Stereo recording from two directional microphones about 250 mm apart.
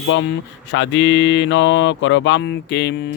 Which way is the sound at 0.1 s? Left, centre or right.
Left.